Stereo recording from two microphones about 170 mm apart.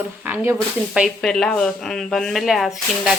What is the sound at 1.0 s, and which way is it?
Speech, centre (ahead or behind).